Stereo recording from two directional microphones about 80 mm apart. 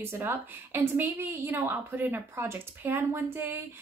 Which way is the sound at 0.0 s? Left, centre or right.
Right.